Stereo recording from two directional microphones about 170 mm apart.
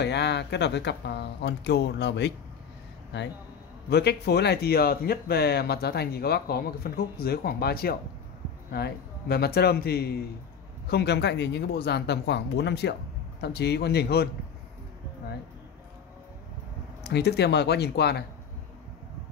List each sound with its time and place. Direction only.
0.0 s speech: 90° left
3.9 s a man's voice: 75° left (ahead or behind)
17.0 s a man's voice: 75° left (ahead or behind)